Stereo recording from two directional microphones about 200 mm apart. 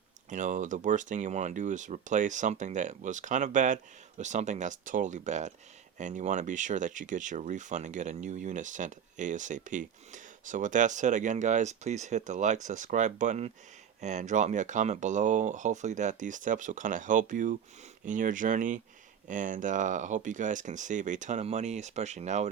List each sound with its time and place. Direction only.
0.3 s speech: 40° right (ahead or behind)